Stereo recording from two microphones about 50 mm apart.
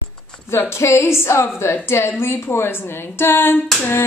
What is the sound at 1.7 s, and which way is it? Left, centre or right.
A woman's voice, left.